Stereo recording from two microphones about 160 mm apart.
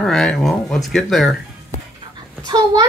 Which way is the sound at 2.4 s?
25° right (ahead or behind).